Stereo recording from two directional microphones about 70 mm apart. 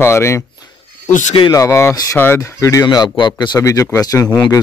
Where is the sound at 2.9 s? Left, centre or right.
Left.